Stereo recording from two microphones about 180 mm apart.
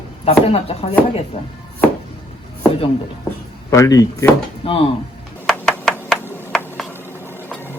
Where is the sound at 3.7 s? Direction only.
20° left (ahead or behind).